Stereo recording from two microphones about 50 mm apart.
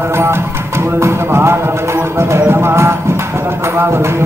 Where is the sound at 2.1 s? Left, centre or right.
Right.